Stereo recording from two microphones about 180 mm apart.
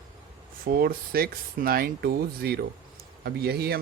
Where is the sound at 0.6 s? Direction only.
55° right (ahead or behind).